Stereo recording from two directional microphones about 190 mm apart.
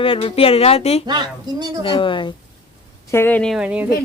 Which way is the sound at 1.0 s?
20° right (ahead or behind).